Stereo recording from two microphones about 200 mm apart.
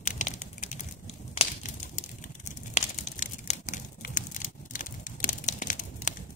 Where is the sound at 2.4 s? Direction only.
35° left (ahead or behind).